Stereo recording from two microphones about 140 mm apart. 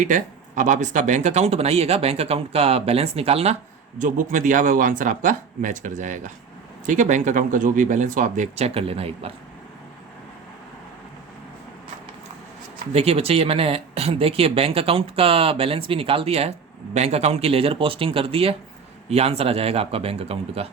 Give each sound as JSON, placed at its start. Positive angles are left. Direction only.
{"t": 0.0, "sound": "speech", "side_deg": -65}
{"t": 4.0, "sound": "speech", "side_deg": -70}
{"t": 8.5, "sound": "speech", "side_deg": -45}
{"t": 12.9, "sound": "speech", "side_deg": -45}